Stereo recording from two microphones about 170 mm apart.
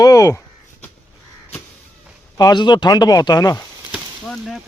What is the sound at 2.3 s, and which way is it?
Speech, 25° left (ahead or behind).